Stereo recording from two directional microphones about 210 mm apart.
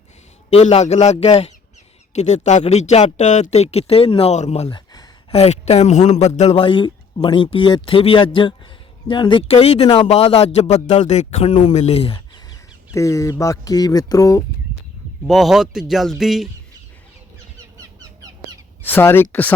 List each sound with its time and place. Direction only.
0.5 s a man's voice: 30° left (ahead or behind)
12.9 s speech: 15° left (ahead or behind)
15.3 s speech: centre (ahead or behind)
18.9 s speech: 10° left (ahead or behind)